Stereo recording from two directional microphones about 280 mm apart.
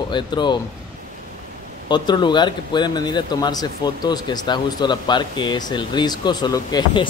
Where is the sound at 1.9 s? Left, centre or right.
Centre.